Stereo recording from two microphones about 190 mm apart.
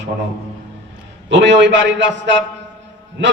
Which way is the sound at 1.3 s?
70° right (ahead or behind).